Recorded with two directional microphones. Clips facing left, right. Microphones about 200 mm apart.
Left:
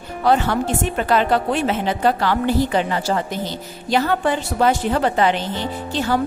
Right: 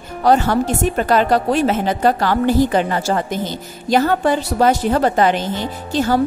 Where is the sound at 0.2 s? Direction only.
40° right (ahead or behind).